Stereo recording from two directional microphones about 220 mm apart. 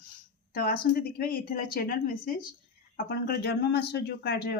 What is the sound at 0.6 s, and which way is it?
Speech, 40° left (ahead or behind).